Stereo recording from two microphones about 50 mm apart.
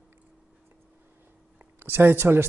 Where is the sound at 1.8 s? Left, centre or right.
Right.